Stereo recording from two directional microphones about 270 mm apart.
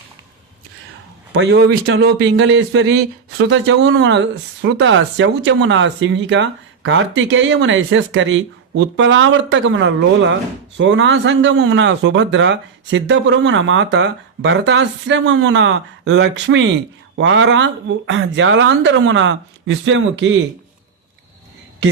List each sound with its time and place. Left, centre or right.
1.3 s speech: right